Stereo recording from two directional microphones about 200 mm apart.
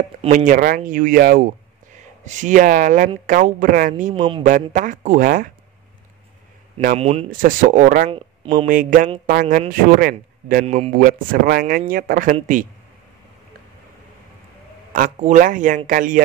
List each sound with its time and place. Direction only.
0.2 s a man's voice: 40° right (ahead or behind)
4.1 s speech: 25° right (ahead or behind)
4.4 s speech: 40° right (ahead or behind)
6.8 s speech: 35° right (ahead or behind)
8.1 s speech: 25° right (ahead or behind)
8.6 s a man's voice: 40° right (ahead or behind)
14.9 s speech: 40° right (ahead or behind)